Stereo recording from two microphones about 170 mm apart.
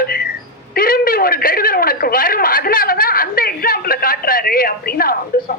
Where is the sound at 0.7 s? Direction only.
60° left (ahead or behind).